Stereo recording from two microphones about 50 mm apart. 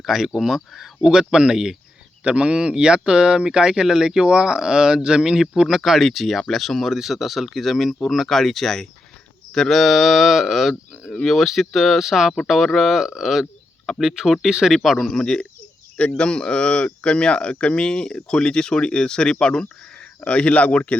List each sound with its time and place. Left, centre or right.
0.0 s speech: centre
11.1 s speech: centre
11.3 s speech: centre
14.7 s speech: centre
15.2 s speech: centre